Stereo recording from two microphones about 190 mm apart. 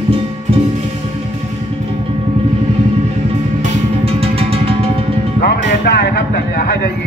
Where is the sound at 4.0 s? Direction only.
30° right (ahead or behind).